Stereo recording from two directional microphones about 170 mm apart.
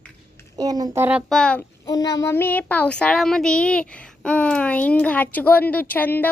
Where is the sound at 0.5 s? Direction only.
20° right (ahead or behind).